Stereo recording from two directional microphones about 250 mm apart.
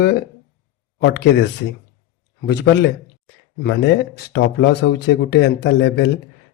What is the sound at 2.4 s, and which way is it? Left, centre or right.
Speech, left.